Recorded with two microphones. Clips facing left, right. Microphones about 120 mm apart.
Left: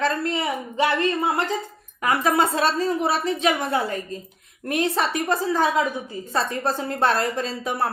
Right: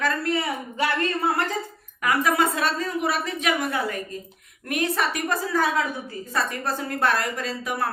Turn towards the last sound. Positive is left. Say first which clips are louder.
# left 3 dB
turn(degrees=30)  # may be behind; listen again after turning